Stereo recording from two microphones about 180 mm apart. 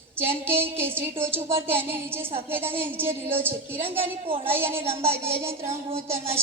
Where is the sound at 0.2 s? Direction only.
10° right (ahead or behind).